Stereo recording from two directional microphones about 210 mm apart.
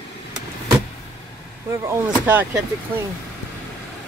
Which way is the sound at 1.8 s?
10° right (ahead or behind).